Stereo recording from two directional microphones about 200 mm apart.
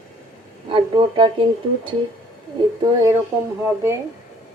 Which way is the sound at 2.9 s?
15° right (ahead or behind).